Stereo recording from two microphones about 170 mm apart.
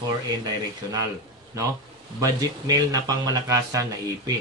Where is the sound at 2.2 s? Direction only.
20° right (ahead or behind).